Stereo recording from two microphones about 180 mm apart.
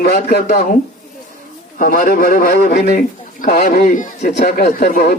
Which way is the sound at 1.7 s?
55° left (ahead or behind).